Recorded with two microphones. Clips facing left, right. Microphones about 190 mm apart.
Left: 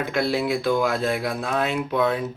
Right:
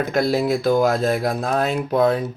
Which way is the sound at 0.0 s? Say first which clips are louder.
Right 4 dB; 40° right (ahead or behind).